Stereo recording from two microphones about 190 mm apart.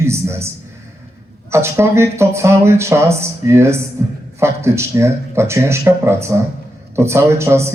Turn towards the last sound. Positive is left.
turn(degrees=-15)  # may be behind; listen again after turning